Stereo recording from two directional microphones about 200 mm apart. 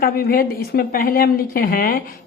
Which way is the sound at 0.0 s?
50° left (ahead or behind).